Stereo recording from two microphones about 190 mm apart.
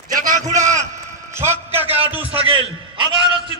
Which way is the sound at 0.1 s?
45° right (ahead or behind).